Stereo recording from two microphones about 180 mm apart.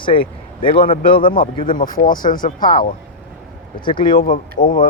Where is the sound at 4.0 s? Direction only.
50° left (ahead or behind).